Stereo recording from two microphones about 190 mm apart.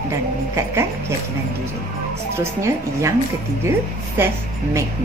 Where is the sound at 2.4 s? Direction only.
15° right (ahead or behind).